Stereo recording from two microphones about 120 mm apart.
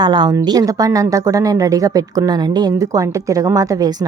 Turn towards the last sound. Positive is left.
turn(degrees=-35)  # may be behind; listen again after turning